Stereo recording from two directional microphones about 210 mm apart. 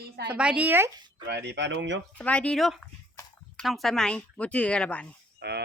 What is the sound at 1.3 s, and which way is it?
Speech, 55° right (ahead or behind).